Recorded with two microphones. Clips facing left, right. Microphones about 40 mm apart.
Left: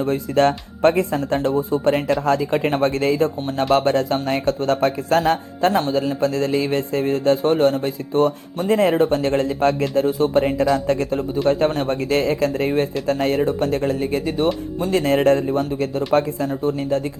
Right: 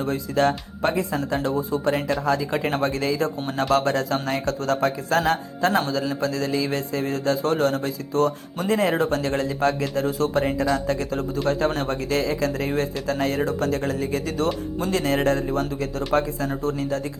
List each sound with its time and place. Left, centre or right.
0.0 s speech: left
11.5 s speech: left